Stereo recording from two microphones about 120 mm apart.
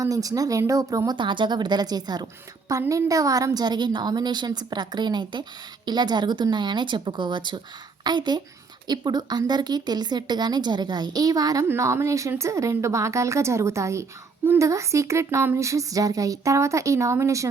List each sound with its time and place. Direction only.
0.0 s speech: 30° right (ahead or behind)
1.1 s a woman's voice: 40° right (ahead or behind); by 17.5 s 25° right (ahead or behind)